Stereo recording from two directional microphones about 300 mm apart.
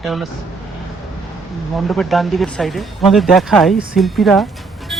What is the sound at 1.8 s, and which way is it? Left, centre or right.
Speech, centre.